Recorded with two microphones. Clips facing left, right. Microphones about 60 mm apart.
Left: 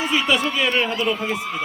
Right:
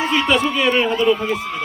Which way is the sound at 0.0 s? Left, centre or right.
Centre.